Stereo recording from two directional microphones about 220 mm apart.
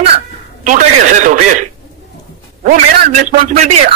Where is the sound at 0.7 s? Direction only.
35° right (ahead or behind).